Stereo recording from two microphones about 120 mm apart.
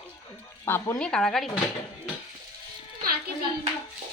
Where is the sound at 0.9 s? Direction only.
5° left (ahead or behind).